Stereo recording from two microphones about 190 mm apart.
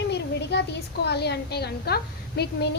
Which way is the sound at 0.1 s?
65° left (ahead or behind).